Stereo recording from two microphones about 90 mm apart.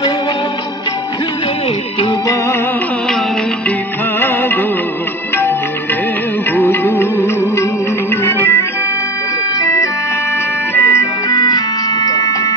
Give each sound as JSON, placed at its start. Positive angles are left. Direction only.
{"t": 4.2, "sound": "music of bollywood", "side_deg": 20}
{"t": 6.5, "sound": "music", "side_deg": 25}
{"t": 10.7, "sound": "music", "side_deg": 35}
{"t": 11.3, "sound": "organ", "side_deg": 50}